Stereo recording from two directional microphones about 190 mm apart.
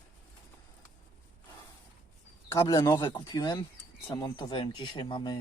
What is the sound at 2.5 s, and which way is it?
Speech, 15° left (ahead or behind).